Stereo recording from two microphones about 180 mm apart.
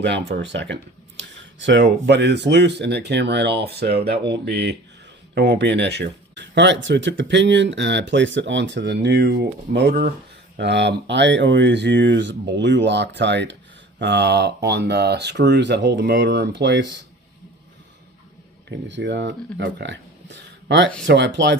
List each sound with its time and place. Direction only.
0.0 s speech: 75° right (ahead or behind)
1.4 s speech: 90° right; by 16.8 s 70° right (ahead or behind)
18.7 s speech: 80° right